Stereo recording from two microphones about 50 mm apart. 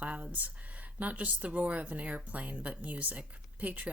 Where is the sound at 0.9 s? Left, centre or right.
Right.